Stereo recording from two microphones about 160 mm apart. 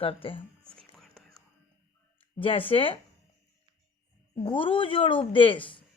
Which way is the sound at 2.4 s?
35° left (ahead or behind).